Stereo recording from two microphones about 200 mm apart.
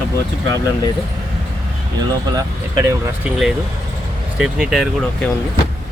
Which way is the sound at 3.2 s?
Centre (ahead or behind).